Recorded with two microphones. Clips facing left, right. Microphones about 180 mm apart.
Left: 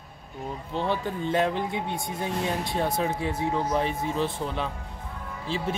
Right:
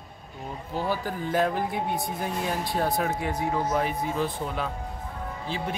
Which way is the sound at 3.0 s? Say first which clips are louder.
Even; 25° left (ahead or behind).